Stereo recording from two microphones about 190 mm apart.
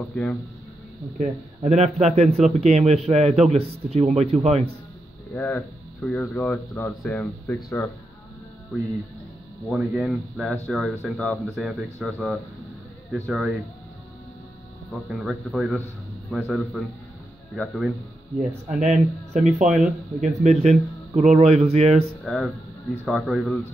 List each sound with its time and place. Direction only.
0.1 s speech: 5° left (ahead or behind)
1.1 s speech: 40° right (ahead or behind)
5.3 s speech: 10° left (ahead or behind)
9.7 s speech: 5° right (ahead or behind)
15.0 s speech: 5° right (ahead or behind)
18.8 s speech: 35° right (ahead or behind)
22.2 s speech: centre (ahead or behind)